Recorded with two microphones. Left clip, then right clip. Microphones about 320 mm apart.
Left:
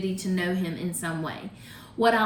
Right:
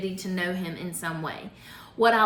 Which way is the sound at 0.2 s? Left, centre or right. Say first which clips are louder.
Left 1 dB; centre.